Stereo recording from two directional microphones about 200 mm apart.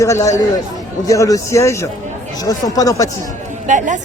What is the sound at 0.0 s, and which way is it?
A man's voice, 15° left (ahead or behind).